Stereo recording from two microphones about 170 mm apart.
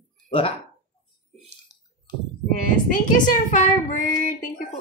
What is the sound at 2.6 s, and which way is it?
Speech, 50° left (ahead or behind).